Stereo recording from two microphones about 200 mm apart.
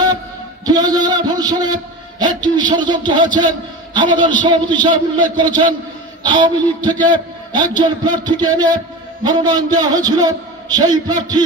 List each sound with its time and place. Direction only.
0.7 s a man's voice: 20° right (ahead or behind)